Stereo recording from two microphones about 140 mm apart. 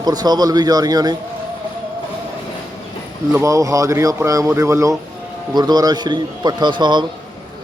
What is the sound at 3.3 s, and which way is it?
A man's voice, 20° right (ahead or behind).